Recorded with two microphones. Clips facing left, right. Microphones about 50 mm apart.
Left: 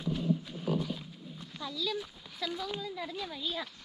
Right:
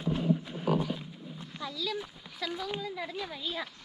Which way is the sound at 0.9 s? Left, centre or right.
Centre.